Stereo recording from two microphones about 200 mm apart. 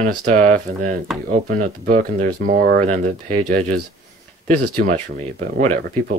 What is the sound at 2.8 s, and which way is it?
Speech, 35° right (ahead or behind).